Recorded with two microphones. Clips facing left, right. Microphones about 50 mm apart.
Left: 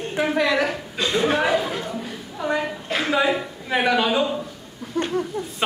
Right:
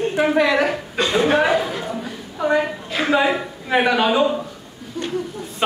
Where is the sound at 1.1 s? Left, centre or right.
Right.